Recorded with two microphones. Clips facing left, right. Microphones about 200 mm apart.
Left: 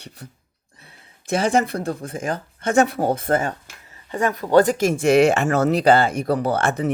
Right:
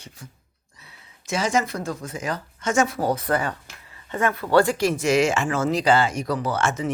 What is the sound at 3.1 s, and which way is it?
Speech, 50° left (ahead or behind).